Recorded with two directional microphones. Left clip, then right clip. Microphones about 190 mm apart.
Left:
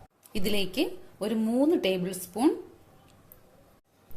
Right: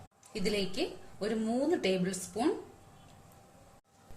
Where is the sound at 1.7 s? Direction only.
30° left (ahead or behind).